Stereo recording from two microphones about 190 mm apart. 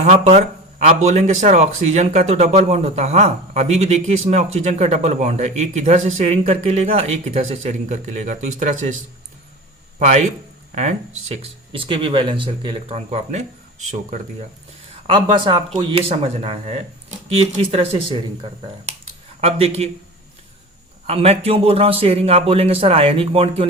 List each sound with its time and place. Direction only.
0.0 s speech: 35° right (ahead or behind)
10.1 s speech: 35° right (ahead or behind)
15.0 s speech: 25° right (ahead or behind)
19.4 s speech: 30° right (ahead or behind)
21.1 s speech: 30° right (ahead or behind)